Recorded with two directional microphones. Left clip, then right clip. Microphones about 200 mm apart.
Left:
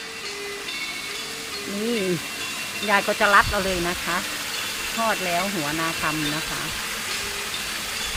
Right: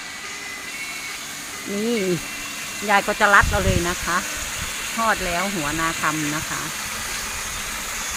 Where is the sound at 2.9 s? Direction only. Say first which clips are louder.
Right 2 dB; 25° right (ahead or behind).